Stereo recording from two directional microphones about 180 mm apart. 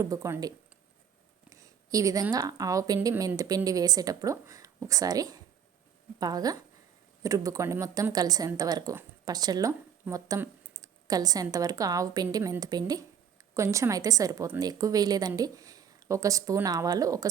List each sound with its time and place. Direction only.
0.0 s a woman's voice: 15° right (ahead or behind)